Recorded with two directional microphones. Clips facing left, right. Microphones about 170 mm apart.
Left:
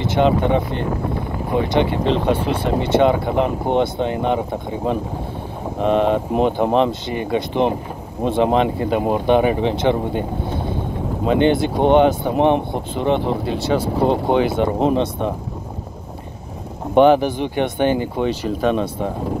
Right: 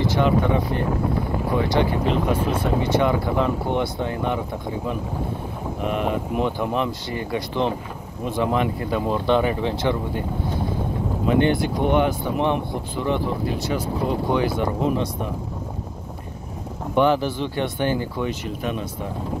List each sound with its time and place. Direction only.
0.0 s speech: 25° left (ahead or behind)
5.9 s speech: 30° left (ahead or behind)
11.2 s speech: 20° left (ahead or behind)
16.9 s speech: 20° left (ahead or behind)
18.6 s speech: 90° left